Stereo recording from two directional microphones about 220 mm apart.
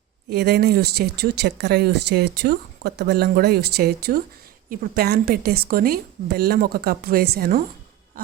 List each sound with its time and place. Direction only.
0.3 s speech: 45° right (ahead or behind)